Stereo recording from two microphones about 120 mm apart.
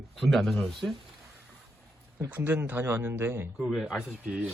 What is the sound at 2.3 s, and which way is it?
Speech, 15° right (ahead or behind).